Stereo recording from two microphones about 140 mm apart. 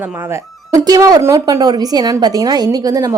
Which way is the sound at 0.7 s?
30° right (ahead or behind).